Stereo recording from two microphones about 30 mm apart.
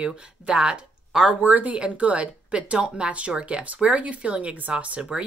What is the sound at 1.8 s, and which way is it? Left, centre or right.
A woman's voice, right.